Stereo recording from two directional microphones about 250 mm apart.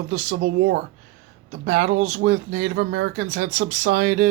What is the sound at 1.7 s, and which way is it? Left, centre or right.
Speech, right.